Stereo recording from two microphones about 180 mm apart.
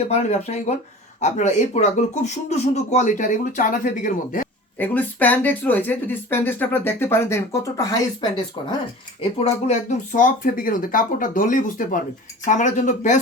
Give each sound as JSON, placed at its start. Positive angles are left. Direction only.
{"t": 0.0, "sound": "speech", "side_deg": 35}
{"t": 4.8, "sound": "speech", "side_deg": 10}
{"t": 9.4, "sound": "speech", "side_deg": 40}